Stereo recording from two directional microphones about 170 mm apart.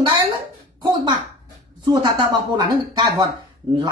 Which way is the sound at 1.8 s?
25° right (ahead or behind).